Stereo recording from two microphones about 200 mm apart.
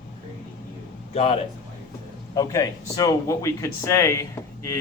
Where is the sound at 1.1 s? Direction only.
30° left (ahead or behind).